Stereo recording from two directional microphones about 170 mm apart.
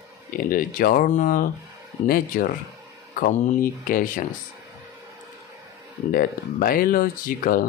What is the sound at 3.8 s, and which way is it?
Speech, 55° left (ahead or behind).